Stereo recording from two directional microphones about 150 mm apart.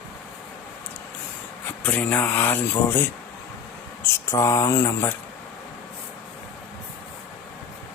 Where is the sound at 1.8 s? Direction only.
10° left (ahead or behind).